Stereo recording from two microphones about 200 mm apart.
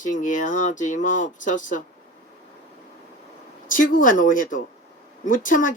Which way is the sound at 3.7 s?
45° left (ahead or behind).